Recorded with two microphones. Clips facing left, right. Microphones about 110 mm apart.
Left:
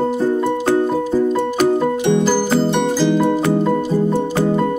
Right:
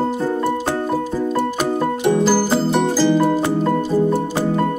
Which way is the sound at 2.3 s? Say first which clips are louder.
Left 1 dB; 5° right (ahead or behind).